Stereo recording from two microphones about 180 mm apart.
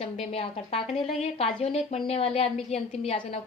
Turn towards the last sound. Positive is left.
turn(degrees=35)  # may be behind; listen again after turning